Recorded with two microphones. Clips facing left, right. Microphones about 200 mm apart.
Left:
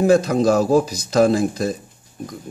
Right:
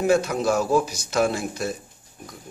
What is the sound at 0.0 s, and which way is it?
A man's voice, 35° left (ahead or behind).